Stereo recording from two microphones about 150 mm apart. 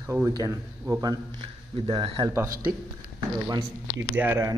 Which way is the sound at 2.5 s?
75° right (ahead or behind).